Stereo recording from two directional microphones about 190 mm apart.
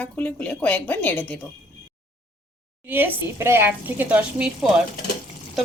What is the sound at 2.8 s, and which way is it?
Speech, 10° right (ahead or behind).